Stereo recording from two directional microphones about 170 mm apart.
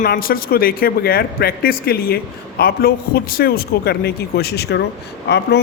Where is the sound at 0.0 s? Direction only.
60° left (ahead or behind).